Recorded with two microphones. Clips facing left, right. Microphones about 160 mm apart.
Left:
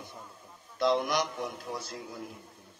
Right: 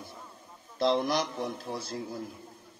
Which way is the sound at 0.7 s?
30° right (ahead or behind).